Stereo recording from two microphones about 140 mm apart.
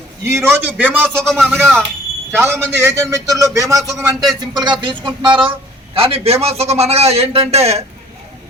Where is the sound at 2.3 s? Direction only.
15° right (ahead or behind); by 7.8 s 50° right (ahead or behind).